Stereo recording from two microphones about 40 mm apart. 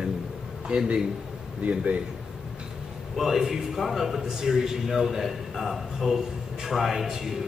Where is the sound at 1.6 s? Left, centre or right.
Right.